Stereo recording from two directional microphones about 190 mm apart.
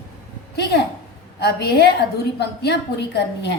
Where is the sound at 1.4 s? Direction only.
60° left (ahead or behind).